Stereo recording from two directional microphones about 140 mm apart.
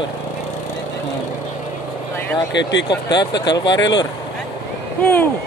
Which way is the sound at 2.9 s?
30° left (ahead or behind).